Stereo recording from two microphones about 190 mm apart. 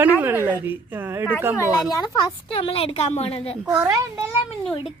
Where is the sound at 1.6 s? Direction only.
20° left (ahead or behind).